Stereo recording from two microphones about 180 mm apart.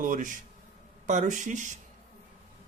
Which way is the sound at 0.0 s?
45° right (ahead or behind).